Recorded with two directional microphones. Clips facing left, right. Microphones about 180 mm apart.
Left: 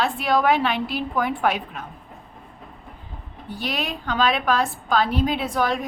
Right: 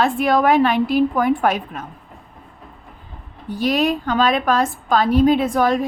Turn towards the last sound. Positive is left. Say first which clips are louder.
# right 7 dB
turn(degrees=-45)  # may be behind; listen again after turning